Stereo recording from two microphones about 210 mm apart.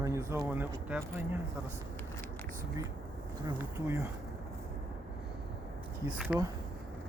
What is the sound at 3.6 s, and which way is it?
Speech, 10° right (ahead or behind).